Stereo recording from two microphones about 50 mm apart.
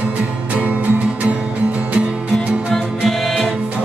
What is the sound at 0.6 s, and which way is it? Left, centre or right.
Music, right.